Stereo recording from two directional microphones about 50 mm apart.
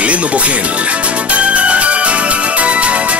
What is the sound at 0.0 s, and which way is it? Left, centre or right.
A man's voice, right.